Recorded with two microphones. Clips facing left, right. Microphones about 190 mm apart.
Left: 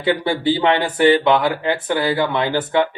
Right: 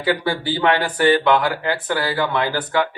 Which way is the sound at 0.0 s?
25° left (ahead or behind).